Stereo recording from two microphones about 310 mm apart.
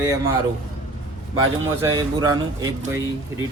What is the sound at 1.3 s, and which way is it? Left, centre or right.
Speech, centre.